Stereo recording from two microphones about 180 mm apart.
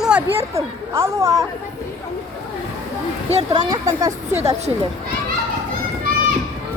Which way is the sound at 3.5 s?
20° right (ahead or behind).